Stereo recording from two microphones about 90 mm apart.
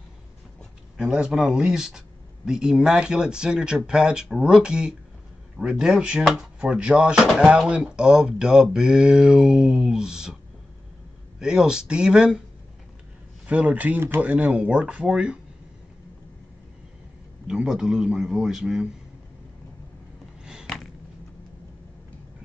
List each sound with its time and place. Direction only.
0.9 s speech: 10° right (ahead or behind)
11.3 s speech: 10° right (ahead or behind)
13.5 s speech: 15° right (ahead or behind)
17.5 s speech: 5° right (ahead or behind)
20.6 s a sound: 5° left (ahead or behind)